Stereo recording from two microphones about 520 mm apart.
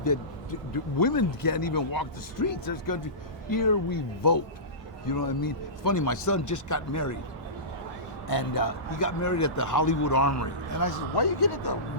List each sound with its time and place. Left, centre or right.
0.7 s a man's voice: left
8.3 s a man's voice: left